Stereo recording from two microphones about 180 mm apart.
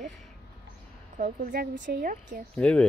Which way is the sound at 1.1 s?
50° right (ahead or behind).